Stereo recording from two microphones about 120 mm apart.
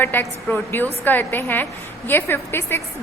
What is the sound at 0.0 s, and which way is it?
A woman's voice, 15° left (ahead or behind).